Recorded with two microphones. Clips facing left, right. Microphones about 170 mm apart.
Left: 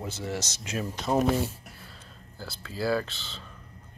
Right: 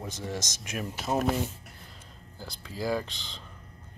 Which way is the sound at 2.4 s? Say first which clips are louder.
Left 2 dB; 15° right (ahead or behind).